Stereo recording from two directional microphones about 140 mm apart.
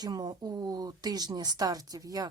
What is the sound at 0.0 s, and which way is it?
A woman's voice, 30° right (ahead or behind).